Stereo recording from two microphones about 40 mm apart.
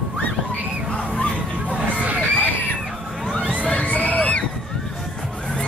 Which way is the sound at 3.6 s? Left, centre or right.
Left.